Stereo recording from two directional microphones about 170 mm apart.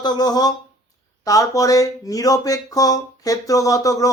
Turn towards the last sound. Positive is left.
turn(degrees=20)  # may be behind; listen again after turning